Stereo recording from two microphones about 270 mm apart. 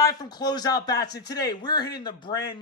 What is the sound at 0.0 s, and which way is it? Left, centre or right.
Speech, centre.